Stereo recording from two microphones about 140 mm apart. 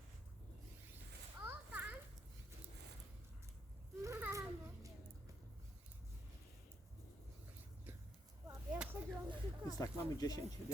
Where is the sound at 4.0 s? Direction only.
20° right (ahead or behind).